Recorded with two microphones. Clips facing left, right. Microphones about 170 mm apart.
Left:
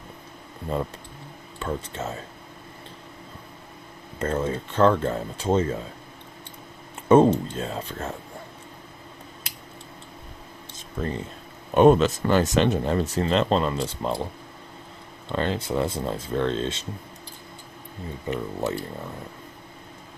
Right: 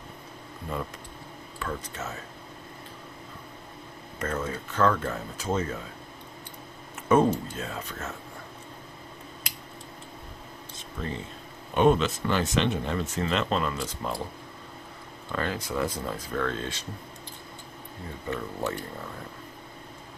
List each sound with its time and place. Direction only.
0.7 s speech: 30° left (ahead or behind)
4.2 s speech: 30° left (ahead or behind)
7.1 s speech: 30° left (ahead or behind)
11.7 s speech: 45° left (ahead or behind); by 14.2 s 25° left (ahead or behind)
15.3 s speech: 25° left (ahead or behind)
18.3 s speech: 20° left (ahead or behind)